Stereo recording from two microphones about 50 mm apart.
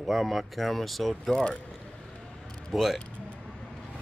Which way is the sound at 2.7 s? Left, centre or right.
Centre.